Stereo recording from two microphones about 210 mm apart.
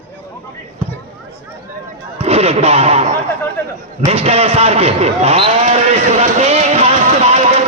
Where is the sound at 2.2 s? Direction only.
30° right (ahead or behind).